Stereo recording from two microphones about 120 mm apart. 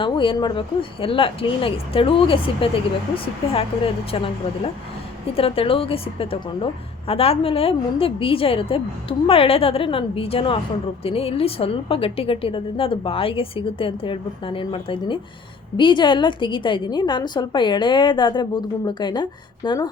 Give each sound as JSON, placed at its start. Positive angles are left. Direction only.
{"t": 0.0, "sound": "a woman's voice", "side_deg": 45}